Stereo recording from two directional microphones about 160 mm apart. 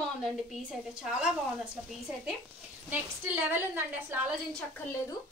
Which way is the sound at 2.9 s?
10° right (ahead or behind).